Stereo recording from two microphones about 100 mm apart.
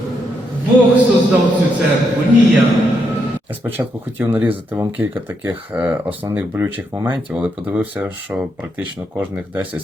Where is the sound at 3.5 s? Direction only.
20° right (ahead or behind).